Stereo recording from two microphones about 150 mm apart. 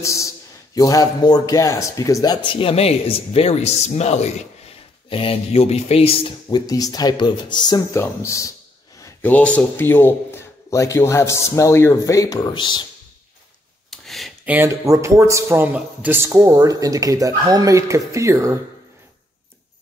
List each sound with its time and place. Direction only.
0.0 s a man's voice: 20° left (ahead or behind)
2.4 s speech: 35° left (ahead or behind)
6.7 s a man's voice: 25° left (ahead or behind)
13.8 s a sound: centre (ahead or behind)
14.4 s speech: 10° right (ahead or behind)